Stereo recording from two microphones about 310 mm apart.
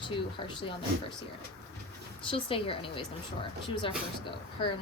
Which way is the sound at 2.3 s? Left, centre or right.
Centre.